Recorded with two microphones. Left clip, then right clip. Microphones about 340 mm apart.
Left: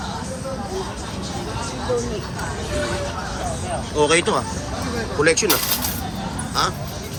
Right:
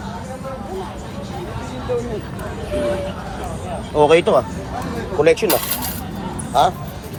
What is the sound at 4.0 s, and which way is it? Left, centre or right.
Speech, centre.